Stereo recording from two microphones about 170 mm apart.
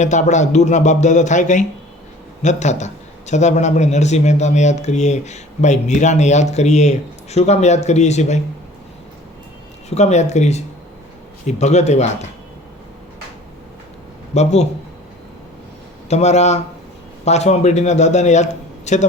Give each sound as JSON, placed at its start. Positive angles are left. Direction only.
{"t": 0.0, "sound": "a man's voice", "side_deg": 45}
{"t": 9.9, "sound": "a man's voice", "side_deg": 40}
{"t": 14.3, "sound": "a man's voice", "side_deg": 40}
{"t": 16.0, "sound": "a man's voice", "side_deg": 40}